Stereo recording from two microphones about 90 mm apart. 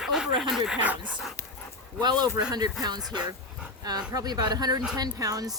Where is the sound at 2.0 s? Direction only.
50° right (ahead or behind).